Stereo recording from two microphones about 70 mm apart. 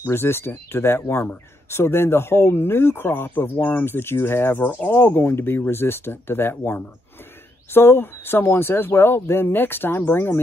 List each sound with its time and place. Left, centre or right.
0.1 s speech: left